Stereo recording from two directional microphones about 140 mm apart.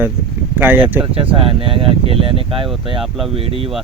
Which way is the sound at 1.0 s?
40° right (ahead or behind).